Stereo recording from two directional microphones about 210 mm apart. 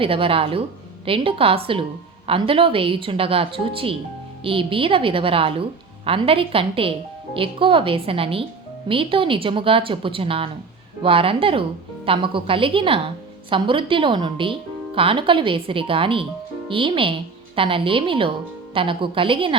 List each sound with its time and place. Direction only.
0.0 s speech: 25° right (ahead or behind)